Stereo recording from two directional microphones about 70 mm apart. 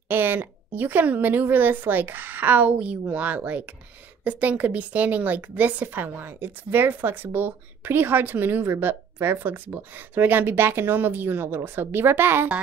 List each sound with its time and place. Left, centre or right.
0.1 s a woman's voice: right